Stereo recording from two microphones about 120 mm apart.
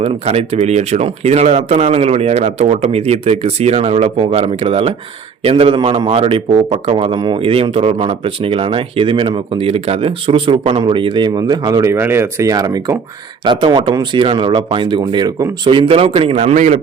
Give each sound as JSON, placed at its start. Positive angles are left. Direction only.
{"t": 0.0, "sound": "speech", "side_deg": -60}